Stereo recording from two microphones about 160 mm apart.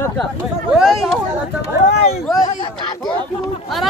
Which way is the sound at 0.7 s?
Centre (ahead or behind).